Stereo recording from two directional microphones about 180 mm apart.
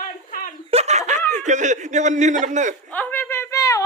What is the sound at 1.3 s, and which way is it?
Speech, 40° right (ahead or behind).